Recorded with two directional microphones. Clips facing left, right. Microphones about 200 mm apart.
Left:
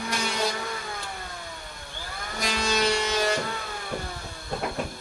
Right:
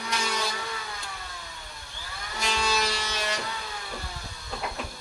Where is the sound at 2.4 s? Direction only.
40° left (ahead or behind).